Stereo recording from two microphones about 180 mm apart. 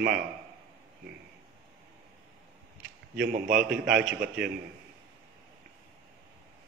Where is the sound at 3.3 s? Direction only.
50° right (ahead or behind).